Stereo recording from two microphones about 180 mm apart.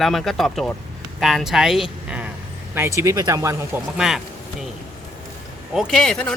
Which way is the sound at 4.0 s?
5° right (ahead or behind).